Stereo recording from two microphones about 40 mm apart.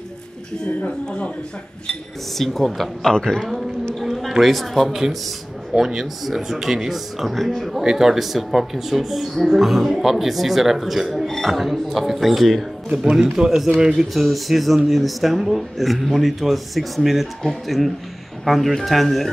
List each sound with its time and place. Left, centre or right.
0.8 s speech: left
2.3 s speech: centre
4.4 s speech: centre
6.2 s speech: centre
7.8 s speech: centre
12.9 s speech: centre
13.9 s speech: centre